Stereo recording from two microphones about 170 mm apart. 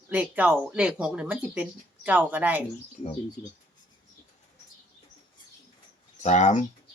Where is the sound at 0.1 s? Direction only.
10° right (ahead or behind).